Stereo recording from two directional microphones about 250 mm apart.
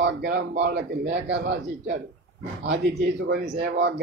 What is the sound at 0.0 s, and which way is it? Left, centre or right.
Speech, right.